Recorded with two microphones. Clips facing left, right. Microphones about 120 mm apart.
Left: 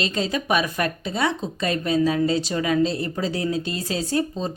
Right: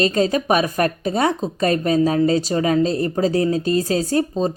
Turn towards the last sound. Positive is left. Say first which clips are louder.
# right 5 dB
turn(degrees=-40)  # may be behind; listen again after turning